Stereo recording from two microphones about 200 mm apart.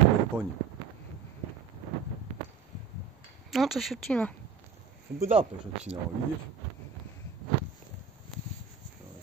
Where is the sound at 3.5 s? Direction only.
Centre (ahead or behind).